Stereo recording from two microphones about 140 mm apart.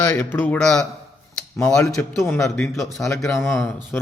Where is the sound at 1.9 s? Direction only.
20° left (ahead or behind).